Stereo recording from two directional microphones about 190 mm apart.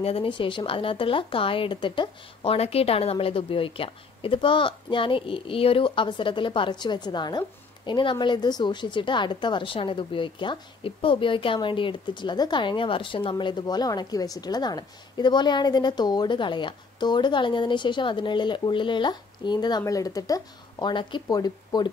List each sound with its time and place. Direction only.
0.0 s speech: 30° left (ahead or behind)